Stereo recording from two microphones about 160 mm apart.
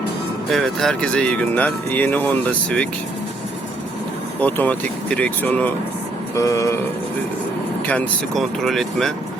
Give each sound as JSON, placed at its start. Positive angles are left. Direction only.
{"t": 0.5, "sound": "speech", "side_deg": 0}
{"t": 4.4, "sound": "speech", "side_deg": 10}
{"t": 6.3, "sound": "vehicle", "side_deg": 20}
{"t": 7.9, "sound": "speech", "side_deg": 5}